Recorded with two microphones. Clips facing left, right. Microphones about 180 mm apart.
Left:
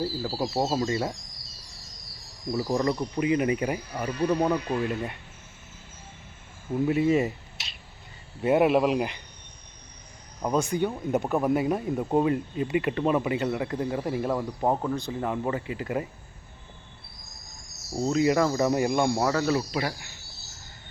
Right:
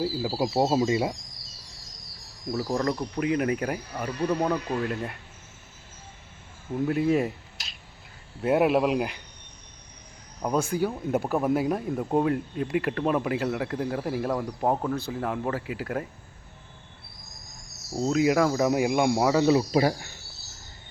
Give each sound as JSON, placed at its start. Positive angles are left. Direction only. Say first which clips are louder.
{"t": 0.0, "sound": "speech", "louder": "right 2 dB", "side_deg": -10}
{"t": 2.5, "sound": "speech", "louder": "left 1 dB", "side_deg": 5}
{"t": 6.8, "sound": "speech", "louder": "left 1 dB", "side_deg": 0}
{"t": 10.4, "sound": "speech", "louder": "even", "side_deg": 0}
{"t": 18.0, "sound": "speech", "louder": "right 1 dB", "side_deg": -5}
{"t": 19.7, "sound": "speech", "louder": "right 7 dB", "side_deg": -35}